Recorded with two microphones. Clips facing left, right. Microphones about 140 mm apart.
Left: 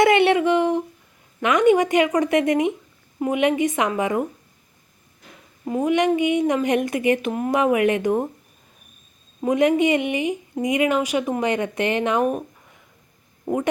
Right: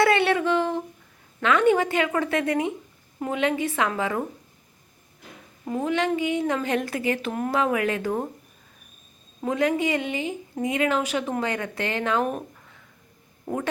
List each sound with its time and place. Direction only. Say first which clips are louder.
0.0 s a sound: left 4 dB; 20° left (ahead or behind)
1.4 s speech: left 3 dB; 15° left (ahead or behind)
5.6 s speech: left 5 dB; 10° left (ahead or behind)
9.4 s speech: left 6 dB; 20° left (ahead or behind)
13.4 s speech: left 5 dB; 15° left (ahead or behind)